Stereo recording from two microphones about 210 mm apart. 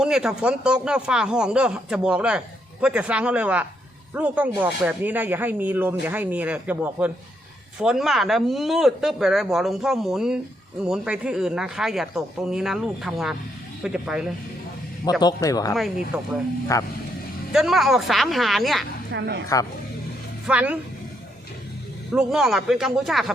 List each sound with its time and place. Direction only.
0.0 s speech: 5° right (ahead or behind)
15.2 s speech: 15° left (ahead or behind)
15.7 s speech: centre (ahead or behind)
16.7 s speech: 15° left (ahead or behind)
17.5 s speech: centre (ahead or behind)
19.1 s speech: 55° right (ahead or behind)
19.5 s speech: 15° left (ahead or behind)
20.5 s speech: 5° right (ahead or behind)
22.1 s speech: 5° right (ahead or behind)